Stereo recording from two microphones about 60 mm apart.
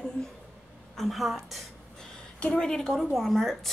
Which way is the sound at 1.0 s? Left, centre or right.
Centre.